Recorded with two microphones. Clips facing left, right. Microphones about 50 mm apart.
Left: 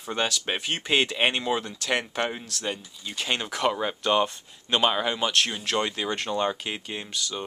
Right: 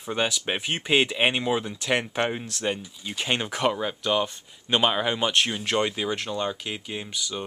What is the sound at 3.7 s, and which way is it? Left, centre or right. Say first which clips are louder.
Speech: left 1 dB; centre.